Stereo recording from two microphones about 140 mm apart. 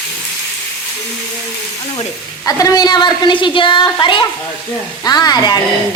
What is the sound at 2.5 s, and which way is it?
A woman's voice, 25° left (ahead or behind).